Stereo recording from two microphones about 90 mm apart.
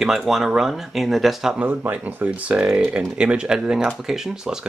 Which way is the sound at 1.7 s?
20° right (ahead or behind).